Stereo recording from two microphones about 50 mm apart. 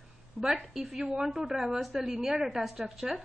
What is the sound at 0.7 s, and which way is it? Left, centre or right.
A woman's voice, centre.